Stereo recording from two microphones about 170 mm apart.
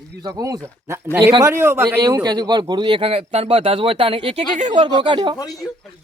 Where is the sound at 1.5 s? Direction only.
15° right (ahead or behind); by 4.7 s 40° right (ahead or behind).